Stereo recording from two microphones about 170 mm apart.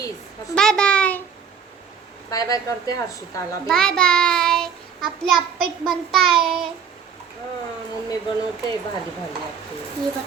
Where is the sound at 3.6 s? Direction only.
5° left (ahead or behind).